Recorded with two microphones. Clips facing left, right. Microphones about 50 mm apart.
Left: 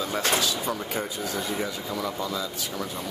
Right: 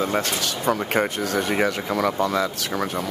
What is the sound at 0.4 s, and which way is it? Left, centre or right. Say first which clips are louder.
Speech: right 4 dB; right.